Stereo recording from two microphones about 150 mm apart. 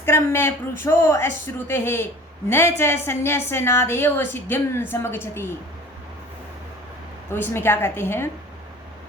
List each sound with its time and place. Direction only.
0.0 s a woman's voice: 15° left (ahead or behind)
7.3 s a woman's voice: 15° left (ahead or behind)